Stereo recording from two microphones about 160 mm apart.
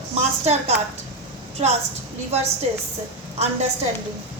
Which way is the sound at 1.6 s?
40° right (ahead or behind).